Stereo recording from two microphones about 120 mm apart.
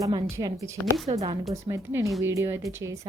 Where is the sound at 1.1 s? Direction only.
50° right (ahead or behind).